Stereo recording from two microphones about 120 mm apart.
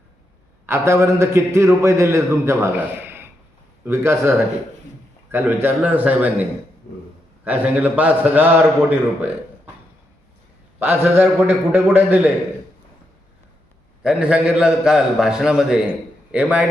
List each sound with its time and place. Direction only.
0.7 s a man's voice: 25° right (ahead or behind)
7.4 s a man's voice: 15° right (ahead or behind)
10.8 s a man's voice: 15° right (ahead or behind)
14.0 s a man's voice: 10° right (ahead or behind)